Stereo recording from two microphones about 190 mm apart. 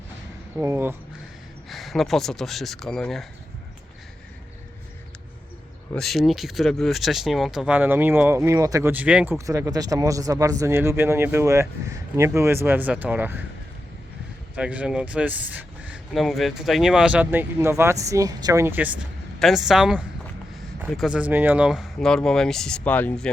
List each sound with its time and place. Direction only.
0.5 s speech: 15° right (ahead or behind)
1.7 s speech: centre (ahead or behind)
5.9 s speech: centre (ahead or behind)
9.5 s speech: 20° right (ahead or behind)
14.5 s speech: 5° right (ahead or behind)